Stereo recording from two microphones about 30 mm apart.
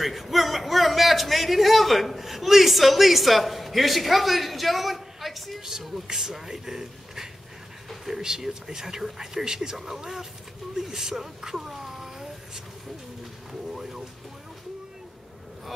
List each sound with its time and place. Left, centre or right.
0.0 s a man's voice: centre
5.7 s speech: centre
7.9 s a sound: centre
8.2 s speech: centre
10.8 s speech: centre